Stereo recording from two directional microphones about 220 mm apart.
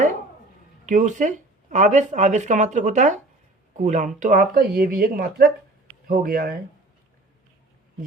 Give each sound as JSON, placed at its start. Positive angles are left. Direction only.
{"t": 0.9, "sound": "speech", "side_deg": -35}